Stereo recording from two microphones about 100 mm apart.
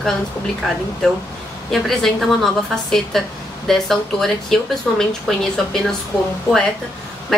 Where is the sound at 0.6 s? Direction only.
Centre (ahead or behind).